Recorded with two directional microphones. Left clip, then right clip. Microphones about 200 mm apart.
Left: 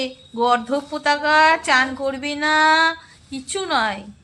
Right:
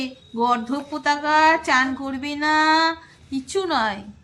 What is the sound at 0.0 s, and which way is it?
A woman's voice, 30° left (ahead or behind).